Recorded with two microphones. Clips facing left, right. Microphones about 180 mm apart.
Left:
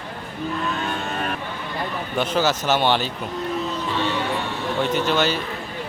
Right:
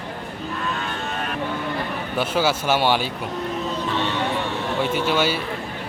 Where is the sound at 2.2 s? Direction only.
10° right (ahead or behind).